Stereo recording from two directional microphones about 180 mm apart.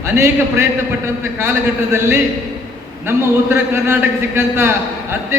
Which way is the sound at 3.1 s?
15° right (ahead or behind).